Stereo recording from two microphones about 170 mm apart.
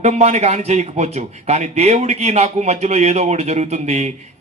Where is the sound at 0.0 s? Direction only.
40° right (ahead or behind).